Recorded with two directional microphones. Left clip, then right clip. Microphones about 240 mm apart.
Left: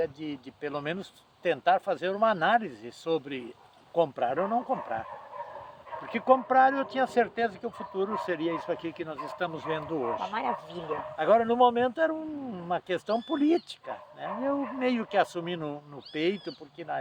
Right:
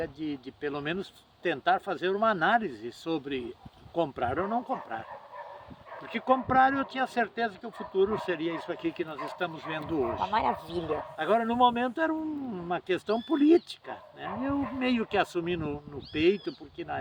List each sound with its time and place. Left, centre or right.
0.0 s speech: centre
6.1 s speech: centre
10.3 s speech: right
11.2 s speech: centre